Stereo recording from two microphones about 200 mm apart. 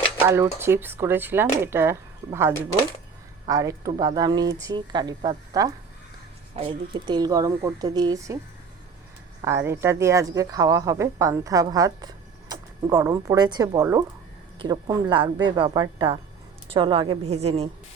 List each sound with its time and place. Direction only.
0.3 s a woman's voice: 10° right (ahead or behind)
9.4 s a woman's voice: 15° right (ahead or behind); by 17.7 s 30° right (ahead or behind)